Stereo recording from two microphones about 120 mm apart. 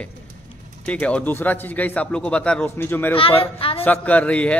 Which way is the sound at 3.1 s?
50° left (ahead or behind).